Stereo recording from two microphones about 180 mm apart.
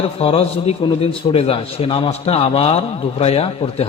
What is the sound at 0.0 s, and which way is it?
A man's voice, 30° left (ahead or behind).